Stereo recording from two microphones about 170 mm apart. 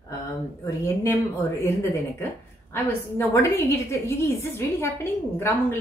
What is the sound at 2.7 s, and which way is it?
A woman's voice, 15° left (ahead or behind).